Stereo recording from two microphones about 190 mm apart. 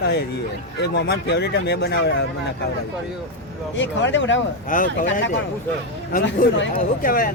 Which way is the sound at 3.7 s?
75° left (ahead or behind).